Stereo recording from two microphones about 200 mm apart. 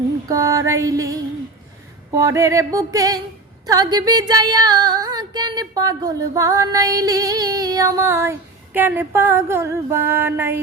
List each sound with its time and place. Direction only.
0.3 s female singing: 15° right (ahead or behind)